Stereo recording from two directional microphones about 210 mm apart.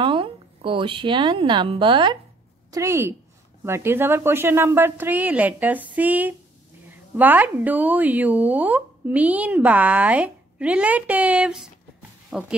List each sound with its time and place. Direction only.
0.0 s speech: 25° right (ahead or behind); by 12.5 s 5° right (ahead or behind)